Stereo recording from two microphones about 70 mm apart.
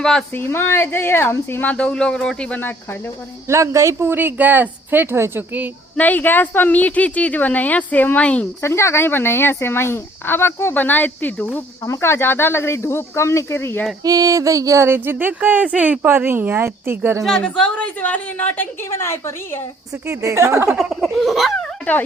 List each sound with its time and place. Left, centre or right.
0.0 s speech: centre
0.3 s speech: left
1.6 s speech: centre
3.5 s speech: right
6.0 s a woman's voice: left
8.6 s speech: left
11.9 s speech: left
14.0 s a sound: right
14.8 s speech: right
17.2 s a woman's voice: centre; by 18.7 s left
18.9 s speech: left
20.1 s speech: right
20.9 s speech: centre